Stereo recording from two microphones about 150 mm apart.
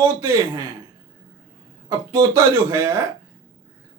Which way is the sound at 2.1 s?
20° right (ahead or behind).